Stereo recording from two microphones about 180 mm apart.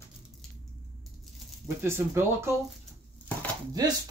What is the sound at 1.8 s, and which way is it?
Speech, 15° right (ahead or behind).